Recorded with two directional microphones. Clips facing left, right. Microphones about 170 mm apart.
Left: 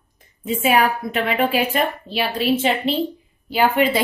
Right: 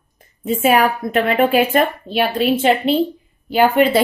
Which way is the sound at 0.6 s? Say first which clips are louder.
Right 3 dB; 50° right (ahead or behind).